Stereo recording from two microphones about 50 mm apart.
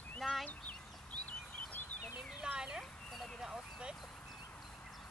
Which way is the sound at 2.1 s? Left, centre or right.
Centre.